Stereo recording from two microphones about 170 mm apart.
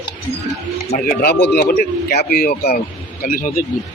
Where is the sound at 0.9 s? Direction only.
60° left (ahead or behind).